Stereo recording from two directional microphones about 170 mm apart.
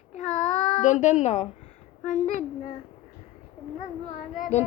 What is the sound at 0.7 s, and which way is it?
A woman's voice, 45° left (ahead or behind).